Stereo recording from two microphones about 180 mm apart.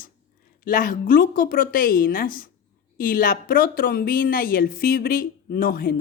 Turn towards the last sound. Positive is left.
turn(degrees=55)  # may be behind; listen again after turning